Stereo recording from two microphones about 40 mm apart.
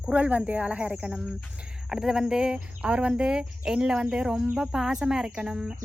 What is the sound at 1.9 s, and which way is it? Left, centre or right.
Speech, centre.